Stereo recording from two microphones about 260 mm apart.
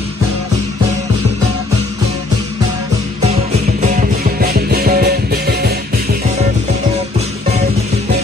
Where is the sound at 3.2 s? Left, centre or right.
Right.